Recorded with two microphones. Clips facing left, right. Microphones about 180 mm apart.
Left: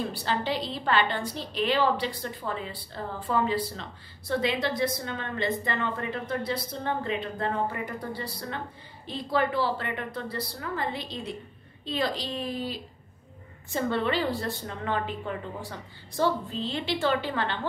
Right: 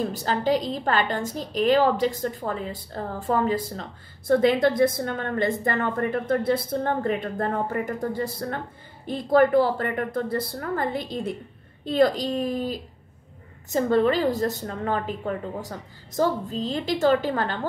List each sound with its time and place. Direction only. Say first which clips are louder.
0.0 s a woman's voice: right 5 dB; 45° right (ahead or behind)